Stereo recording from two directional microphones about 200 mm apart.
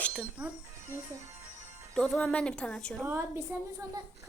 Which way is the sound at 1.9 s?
5° left (ahead or behind).